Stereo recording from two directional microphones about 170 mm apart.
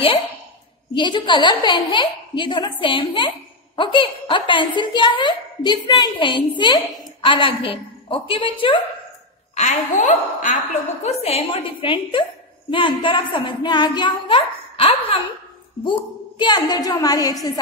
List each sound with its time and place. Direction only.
0.9 s a woman's voice: 30° left (ahead or behind)
9.6 s a woman's voice: 45° left (ahead or behind); by 17.6 s 20° left (ahead or behind)